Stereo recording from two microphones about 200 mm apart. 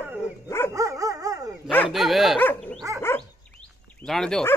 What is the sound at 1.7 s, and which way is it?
Dog, 5° left (ahead or behind).